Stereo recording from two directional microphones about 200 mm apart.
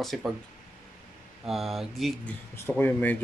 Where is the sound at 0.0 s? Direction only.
Centre (ahead or behind).